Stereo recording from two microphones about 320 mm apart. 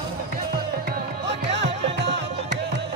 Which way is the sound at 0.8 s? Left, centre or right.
Right.